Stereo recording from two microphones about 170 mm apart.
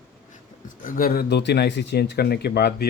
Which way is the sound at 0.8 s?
55° left (ahead or behind).